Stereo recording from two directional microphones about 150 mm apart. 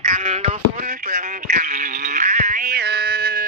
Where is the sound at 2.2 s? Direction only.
55° right (ahead or behind); by 3.4 s 90° right.